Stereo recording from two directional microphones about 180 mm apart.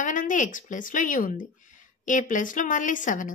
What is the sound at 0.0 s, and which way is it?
A woman's voice, 45° left (ahead or behind).